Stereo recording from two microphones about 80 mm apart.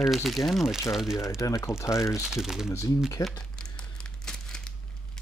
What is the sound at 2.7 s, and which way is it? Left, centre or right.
Speech, left.